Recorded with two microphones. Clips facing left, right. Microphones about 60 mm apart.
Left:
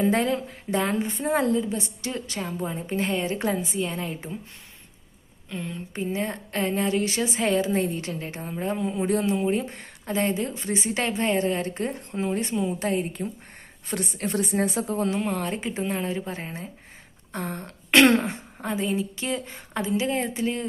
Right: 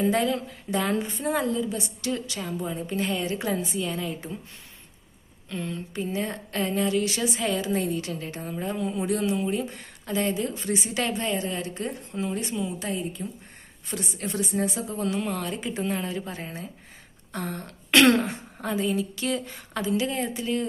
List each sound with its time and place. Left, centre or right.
0.1 s a woman's voice: left
5.5 s speech: centre
5.9 s a woman's voice: left
9.0 s a woman's voice: left
15.1 s a woman's voice: left